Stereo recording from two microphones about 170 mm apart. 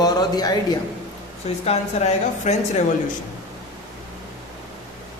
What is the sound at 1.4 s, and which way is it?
Speech, 35° left (ahead or behind).